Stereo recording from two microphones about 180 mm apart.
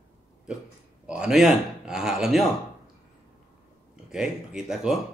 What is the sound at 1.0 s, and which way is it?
A man's voice, 5° right (ahead or behind).